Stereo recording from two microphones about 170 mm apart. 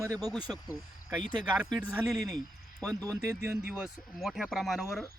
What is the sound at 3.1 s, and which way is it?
Speech, 15° right (ahead or behind).